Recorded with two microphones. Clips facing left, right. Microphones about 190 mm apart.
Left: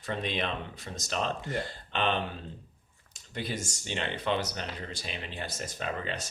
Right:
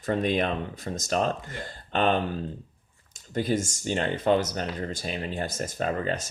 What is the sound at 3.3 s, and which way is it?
Speech, 45° right (ahead or behind).